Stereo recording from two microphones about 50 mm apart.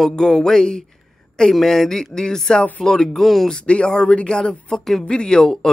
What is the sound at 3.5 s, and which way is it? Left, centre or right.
A man's voice, centre.